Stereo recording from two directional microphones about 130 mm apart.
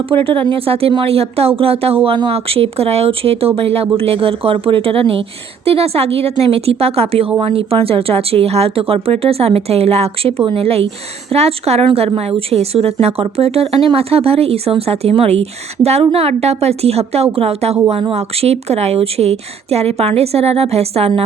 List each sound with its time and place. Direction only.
0.3 s speech: 45° right (ahead or behind)